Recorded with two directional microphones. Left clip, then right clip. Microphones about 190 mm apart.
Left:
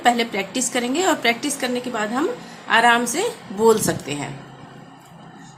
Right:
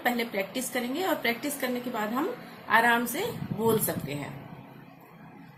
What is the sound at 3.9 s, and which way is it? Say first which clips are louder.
Speech: left 9 dB; 30° left (ahead or behind).